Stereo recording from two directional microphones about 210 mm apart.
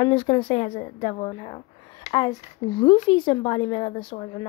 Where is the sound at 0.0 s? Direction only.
25° left (ahead or behind).